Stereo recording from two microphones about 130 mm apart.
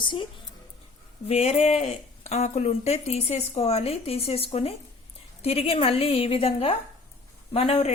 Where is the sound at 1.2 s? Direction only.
55° left (ahead or behind).